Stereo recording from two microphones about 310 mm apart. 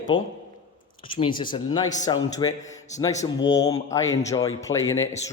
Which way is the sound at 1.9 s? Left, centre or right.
Left.